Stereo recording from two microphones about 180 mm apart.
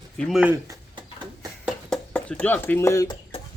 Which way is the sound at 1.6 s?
5° left (ahead or behind).